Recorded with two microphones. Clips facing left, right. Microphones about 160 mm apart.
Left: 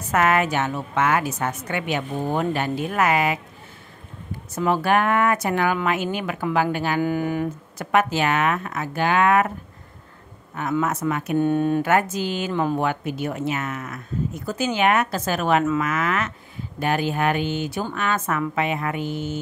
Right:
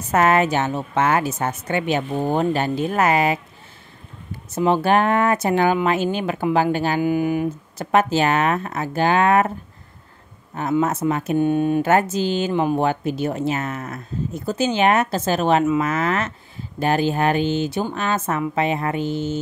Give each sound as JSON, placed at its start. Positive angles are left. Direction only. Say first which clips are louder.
{"t": 0.1, "sound": "a woman's voice", "louder": "right 3 dB", "side_deg": -30}
{"t": 4.6, "sound": "a woman's voice", "louder": "right 3 dB", "side_deg": -25}
{"t": 7.0, "sound": "speech", "louder": "right 3 dB", "side_deg": -15}
{"t": 7.7, "sound": "speech", "louder": "right 3 dB", "side_deg": -30}
{"t": 10.5, "sound": "a woman's voice", "louder": "right 3 dB", "side_deg": -30}
{"t": 11.3, "sound": "speech", "louder": "even", "side_deg": -15}
{"t": 11.8, "sound": "a woman's voice", "louder": "right 3 dB", "side_deg": -30}